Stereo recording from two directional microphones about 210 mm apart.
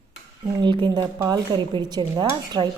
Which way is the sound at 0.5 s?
20° right (ahead or behind).